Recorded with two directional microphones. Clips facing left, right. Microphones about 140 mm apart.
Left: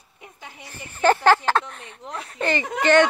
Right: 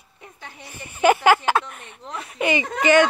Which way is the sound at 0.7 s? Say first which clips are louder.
Right 1 dB; 15° right (ahead or behind).